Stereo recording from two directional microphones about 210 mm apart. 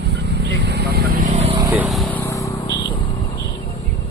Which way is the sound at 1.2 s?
30° right (ahead or behind).